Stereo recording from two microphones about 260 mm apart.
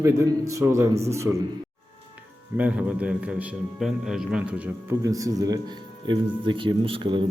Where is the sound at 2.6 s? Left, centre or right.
Centre.